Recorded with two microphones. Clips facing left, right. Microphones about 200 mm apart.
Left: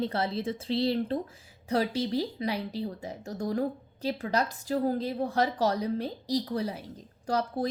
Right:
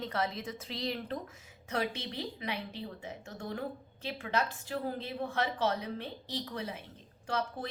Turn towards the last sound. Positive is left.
turn(degrees=35)  # may be behind; listen again after turning